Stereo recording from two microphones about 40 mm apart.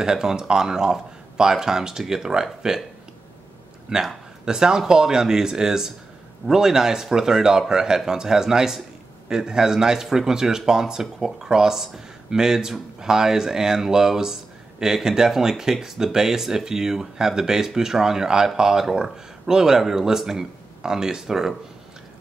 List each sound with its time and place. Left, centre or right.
0.0 s speech: centre
3.9 s speech: centre